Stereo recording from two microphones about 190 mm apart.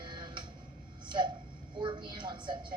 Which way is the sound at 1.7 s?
25° right (ahead or behind).